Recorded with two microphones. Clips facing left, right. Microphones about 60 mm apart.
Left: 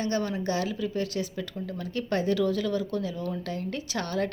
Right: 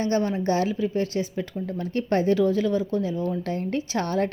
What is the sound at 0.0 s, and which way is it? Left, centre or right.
Speech, right.